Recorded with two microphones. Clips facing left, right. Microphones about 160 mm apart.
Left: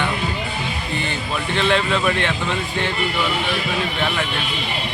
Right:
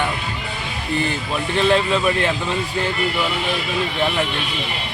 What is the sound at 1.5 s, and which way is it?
Speech, 35° right (ahead or behind).